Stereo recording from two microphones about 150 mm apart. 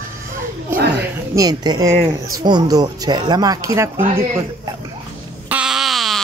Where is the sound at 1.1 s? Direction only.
25° right (ahead or behind).